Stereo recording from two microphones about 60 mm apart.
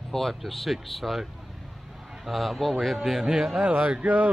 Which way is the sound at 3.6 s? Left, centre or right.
Right.